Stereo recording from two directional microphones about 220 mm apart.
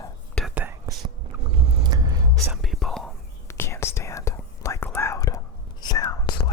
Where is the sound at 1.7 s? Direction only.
20° right (ahead or behind).